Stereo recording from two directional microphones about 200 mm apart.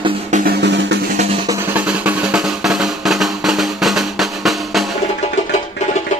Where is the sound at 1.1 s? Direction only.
35° right (ahead or behind).